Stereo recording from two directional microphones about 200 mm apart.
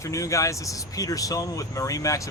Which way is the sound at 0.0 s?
15° left (ahead or behind).